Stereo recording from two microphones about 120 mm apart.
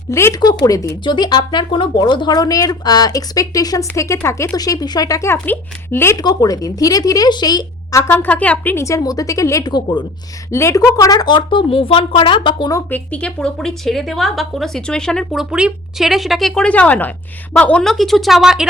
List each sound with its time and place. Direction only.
0.1 s speech: 20° left (ahead or behind)
1.0 s speech: 40° left (ahead or behind); by 6.1 s 20° left (ahead or behind)
6.1 s speech: 35° left (ahead or behind)
8.1 s speech: 15° left (ahead or behind); by 12.7 s 45° left (ahead or behind)
12.9 s a woman's voice: 10° left (ahead or behind)